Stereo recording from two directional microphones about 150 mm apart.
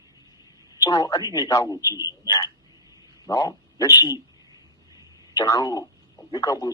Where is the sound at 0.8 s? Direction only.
25° left (ahead or behind).